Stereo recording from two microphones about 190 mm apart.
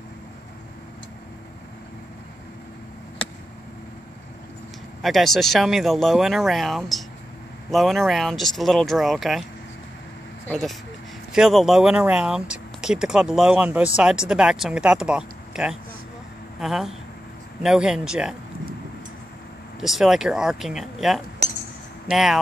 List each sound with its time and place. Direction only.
5.0 s speech: centre (ahead or behind)
10.5 s speech: centre (ahead or behind)
19.8 s speech: centre (ahead or behind)
21.4 s chink: 35° right (ahead or behind)
22.1 s speech: centre (ahead or behind)